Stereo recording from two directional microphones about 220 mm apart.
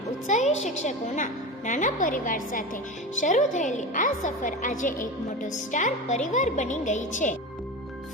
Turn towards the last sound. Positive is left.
turn(degrees=35)  # may be behind; listen again after turning